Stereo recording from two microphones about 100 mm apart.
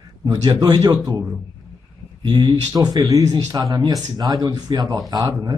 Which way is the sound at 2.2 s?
50° right (ahead or behind).